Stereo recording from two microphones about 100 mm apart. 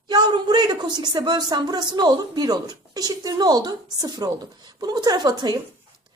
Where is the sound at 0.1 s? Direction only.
45° right (ahead or behind).